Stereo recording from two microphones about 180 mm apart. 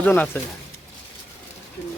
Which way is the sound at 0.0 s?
10° left (ahead or behind).